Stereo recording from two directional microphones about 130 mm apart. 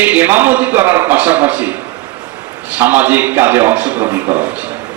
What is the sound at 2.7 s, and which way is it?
A man's voice, 15° right (ahead or behind).